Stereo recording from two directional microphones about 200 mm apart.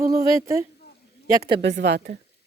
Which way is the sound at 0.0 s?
15° right (ahead or behind).